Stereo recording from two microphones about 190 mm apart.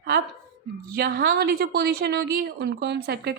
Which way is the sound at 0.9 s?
55° right (ahead or behind).